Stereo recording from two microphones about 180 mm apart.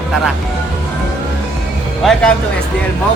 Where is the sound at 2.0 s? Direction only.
Centre (ahead or behind).